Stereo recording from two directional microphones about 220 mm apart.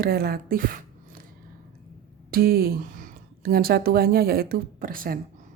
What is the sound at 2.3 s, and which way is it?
A woman's voice, 45° right (ahead or behind).